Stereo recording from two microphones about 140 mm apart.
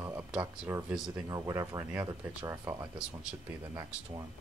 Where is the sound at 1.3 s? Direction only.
25° right (ahead or behind).